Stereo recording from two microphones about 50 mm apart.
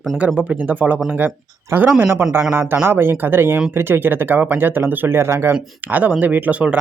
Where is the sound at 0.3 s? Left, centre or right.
Right.